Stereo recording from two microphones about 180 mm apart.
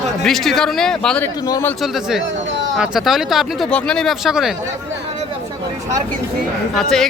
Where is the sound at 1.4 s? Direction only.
20° left (ahead or behind).